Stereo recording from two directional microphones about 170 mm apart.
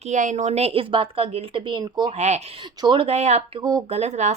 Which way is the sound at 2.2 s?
40° right (ahead or behind).